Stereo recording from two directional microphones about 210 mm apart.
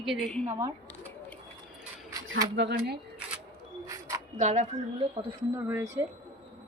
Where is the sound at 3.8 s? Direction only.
15° right (ahead or behind).